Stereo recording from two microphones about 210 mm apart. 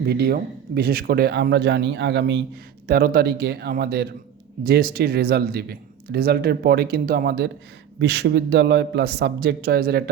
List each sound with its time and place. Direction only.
0.0 s a man's voice: 50° right (ahead or behind)
2.8 s a man's voice: 45° right (ahead or behind)